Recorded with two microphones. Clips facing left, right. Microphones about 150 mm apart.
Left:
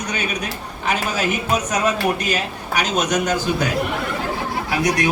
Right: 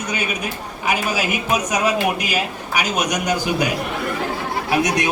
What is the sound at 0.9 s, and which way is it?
A man's voice, 10° right (ahead or behind).